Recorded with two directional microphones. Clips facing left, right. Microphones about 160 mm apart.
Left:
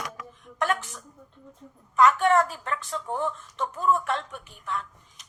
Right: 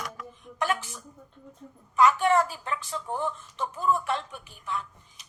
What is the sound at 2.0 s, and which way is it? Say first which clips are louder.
A woman's voice: left 1 dB; 5° right (ahead or behind).